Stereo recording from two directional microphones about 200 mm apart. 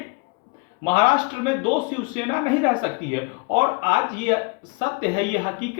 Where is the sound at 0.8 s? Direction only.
25° right (ahead or behind).